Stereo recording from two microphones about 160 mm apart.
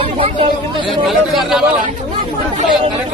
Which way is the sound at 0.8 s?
Centre (ahead or behind).